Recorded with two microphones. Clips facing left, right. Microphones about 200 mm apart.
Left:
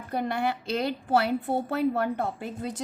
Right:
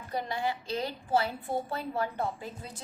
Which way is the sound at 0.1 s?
60° left (ahead or behind).